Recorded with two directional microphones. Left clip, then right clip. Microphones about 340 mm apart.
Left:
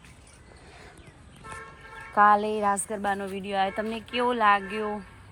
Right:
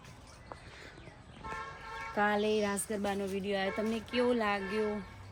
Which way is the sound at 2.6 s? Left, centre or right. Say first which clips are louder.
Left 8 dB; centre.